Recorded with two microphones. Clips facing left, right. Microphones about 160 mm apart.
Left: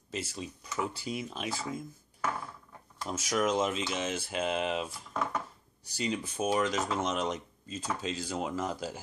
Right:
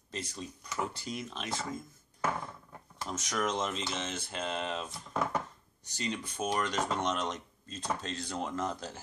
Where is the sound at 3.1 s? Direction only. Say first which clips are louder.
Left 4 dB; 10° left (ahead or behind).